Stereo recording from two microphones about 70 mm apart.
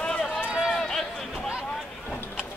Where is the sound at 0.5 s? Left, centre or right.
Centre.